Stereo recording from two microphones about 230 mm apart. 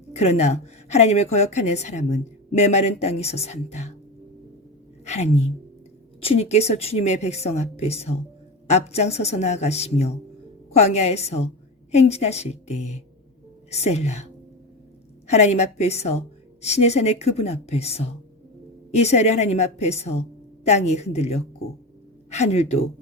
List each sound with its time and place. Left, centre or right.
0.1 s a woman's voice: left
5.0 s a woman's voice: left
15.3 s a woman's voice: left